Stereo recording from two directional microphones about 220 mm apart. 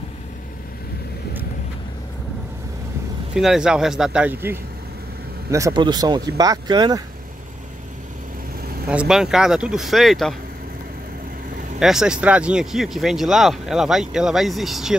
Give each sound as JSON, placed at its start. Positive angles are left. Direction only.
{"t": 3.3, "sound": "speech", "side_deg": 0}
{"t": 8.8, "sound": "speech", "side_deg": -5}
{"t": 11.8, "sound": "speech", "side_deg": 0}